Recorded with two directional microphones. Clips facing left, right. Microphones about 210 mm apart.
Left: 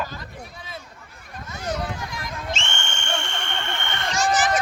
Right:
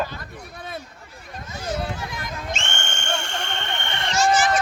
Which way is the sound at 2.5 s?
50° right (ahead or behind).